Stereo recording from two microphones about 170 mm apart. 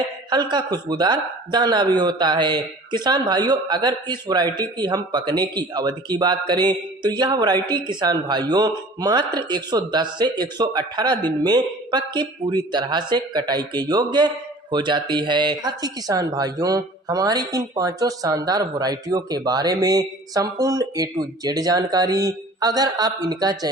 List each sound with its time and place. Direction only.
0.3 s speech: 25° right (ahead or behind)